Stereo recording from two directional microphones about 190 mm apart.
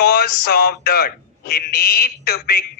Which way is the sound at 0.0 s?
55° left (ahead or behind).